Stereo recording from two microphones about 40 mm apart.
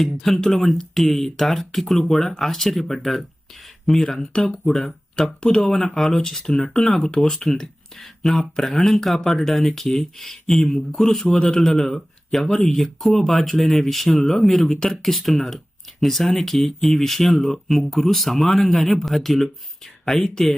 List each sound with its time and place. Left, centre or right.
0.0 s speech: centre